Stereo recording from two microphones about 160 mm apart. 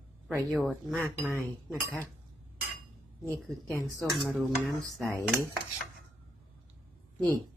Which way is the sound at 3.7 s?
5° left (ahead or behind).